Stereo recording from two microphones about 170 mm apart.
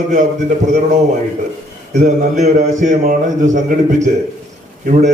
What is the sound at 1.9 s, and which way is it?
A man's voice, 45° right (ahead or behind).